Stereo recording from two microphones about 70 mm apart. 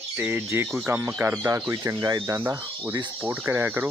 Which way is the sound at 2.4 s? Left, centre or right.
Right.